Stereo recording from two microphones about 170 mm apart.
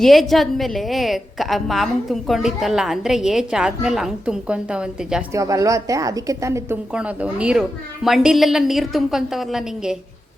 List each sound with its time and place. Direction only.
0.0 s a woman's voice: centre (ahead or behind)
5.3 s a woman's voice: 20° right (ahead or behind)
6.9 s a woman's voice: 5° right (ahead or behind)